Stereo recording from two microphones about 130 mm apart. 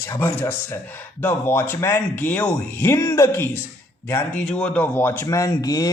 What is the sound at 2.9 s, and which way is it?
Speech, 25° left (ahead or behind).